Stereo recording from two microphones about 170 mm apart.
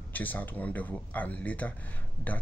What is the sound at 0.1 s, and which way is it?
Speech, 10° left (ahead or behind).